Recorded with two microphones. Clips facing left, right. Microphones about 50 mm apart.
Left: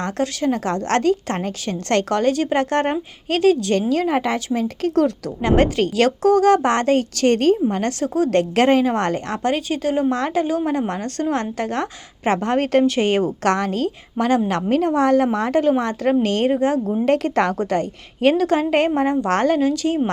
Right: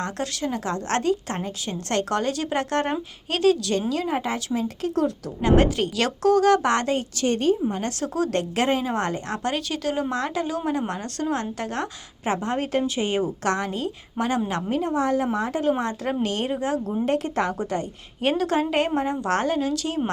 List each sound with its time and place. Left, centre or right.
0.0 s a woman's voice: left
4.5 s a woman's voice: left
5.4 s a woman's voice: left
6.2 s a woman's voice: left
7.2 s a woman's voice: left
7.7 s a woman's voice: left
15.8 s a woman's voice: left
17.1 s a woman's voice: left